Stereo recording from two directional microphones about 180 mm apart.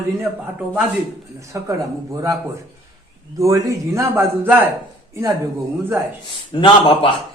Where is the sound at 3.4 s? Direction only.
15° right (ahead or behind).